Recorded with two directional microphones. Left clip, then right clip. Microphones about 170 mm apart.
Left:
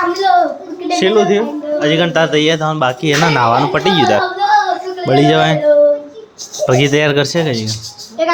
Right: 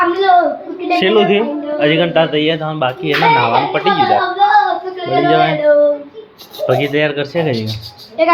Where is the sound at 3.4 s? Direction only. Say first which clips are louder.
Left 1 dB; 55° left (ahead or behind).